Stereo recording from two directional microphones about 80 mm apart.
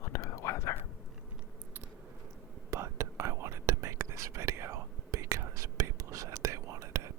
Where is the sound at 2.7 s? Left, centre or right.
Right.